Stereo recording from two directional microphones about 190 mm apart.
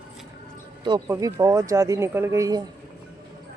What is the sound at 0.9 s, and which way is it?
Speech, 15° right (ahead or behind).